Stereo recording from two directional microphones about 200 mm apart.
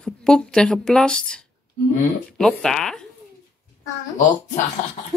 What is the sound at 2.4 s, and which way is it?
Speech, 5° left (ahead or behind).